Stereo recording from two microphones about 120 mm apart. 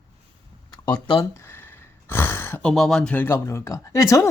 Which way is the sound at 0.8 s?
35° left (ahead or behind).